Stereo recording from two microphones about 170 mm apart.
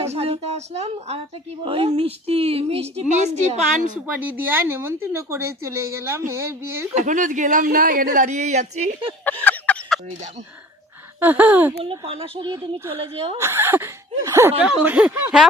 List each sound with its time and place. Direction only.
0.0 s a woman's voice: 35° right (ahead or behind)
4.0 s speech: 10° right (ahead or behind)
6.9 s speech: 45° right (ahead or behind)
9.2 s a sound: 10° left (ahead or behind)
11.2 s speech: 10° right (ahead or behind)
11.8 s a woman's voice: 35° right (ahead or behind)
13.4 s speech: 15° right (ahead or behind)